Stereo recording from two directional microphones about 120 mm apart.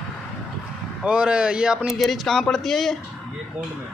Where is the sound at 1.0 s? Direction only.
10° right (ahead or behind).